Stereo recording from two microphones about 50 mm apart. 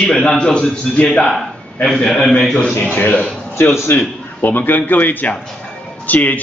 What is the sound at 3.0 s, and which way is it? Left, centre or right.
Speech, left.